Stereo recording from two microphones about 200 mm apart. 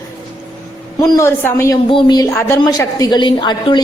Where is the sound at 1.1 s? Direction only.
15° left (ahead or behind).